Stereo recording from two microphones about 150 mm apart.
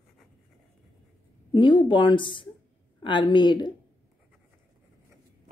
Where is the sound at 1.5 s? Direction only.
35° left (ahead or behind).